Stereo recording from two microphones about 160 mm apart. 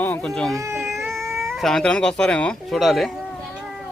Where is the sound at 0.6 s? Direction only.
15° right (ahead or behind).